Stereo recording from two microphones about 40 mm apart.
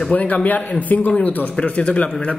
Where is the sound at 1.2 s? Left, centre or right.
Left.